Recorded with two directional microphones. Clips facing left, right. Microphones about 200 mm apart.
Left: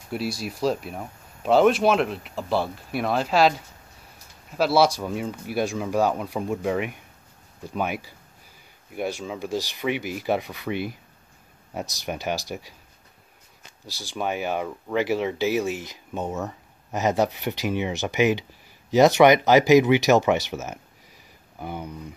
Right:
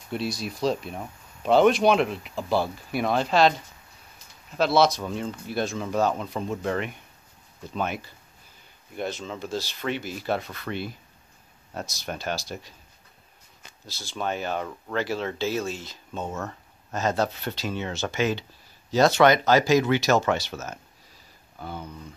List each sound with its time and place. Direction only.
0.1 s speech: 5° left (ahead or behind)
13.8 s speech: 15° left (ahead or behind)